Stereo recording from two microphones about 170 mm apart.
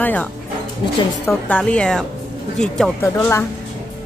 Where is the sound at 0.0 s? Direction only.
10° left (ahead or behind).